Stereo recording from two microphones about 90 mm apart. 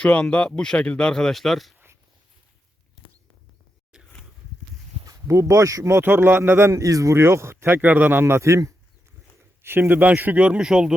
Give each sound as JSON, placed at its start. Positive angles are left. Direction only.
{"t": 0.0, "sound": "speech", "side_deg": 15}
{"t": 3.9, "sound": "a sound", "side_deg": -5}
{"t": 5.0, "sound": "a man's voice", "side_deg": -35}
{"t": 9.6, "sound": "speech", "side_deg": -25}